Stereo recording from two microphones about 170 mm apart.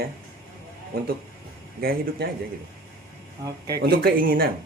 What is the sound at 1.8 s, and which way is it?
Speech, 60° right (ahead or behind).